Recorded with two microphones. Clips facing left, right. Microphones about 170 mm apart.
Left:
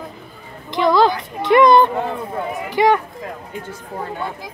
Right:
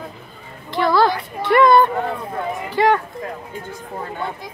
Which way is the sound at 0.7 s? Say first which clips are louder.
Left 2 dB; 15° left (ahead or behind).